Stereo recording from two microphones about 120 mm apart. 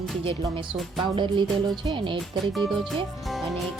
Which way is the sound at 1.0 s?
45° right (ahead or behind).